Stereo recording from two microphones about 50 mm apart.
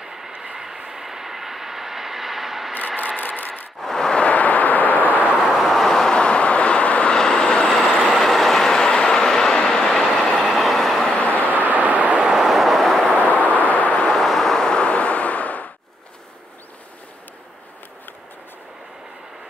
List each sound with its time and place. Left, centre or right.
0.0 s vehicle: centre
3.2 s a sound: left
3.8 s a sound: centre
4.1 s vehicle: left
5.4 s vehicle: centre
6.1 s vehicle: centre
7.1 s vehicle: centre
7.6 s train: centre
11.1 s vehicle: left
11.5 s vehicle: right
12.3 s vehicle: centre
13.0 s a sound: left
14.1 s vehicle: centre
14.8 s vehicle: left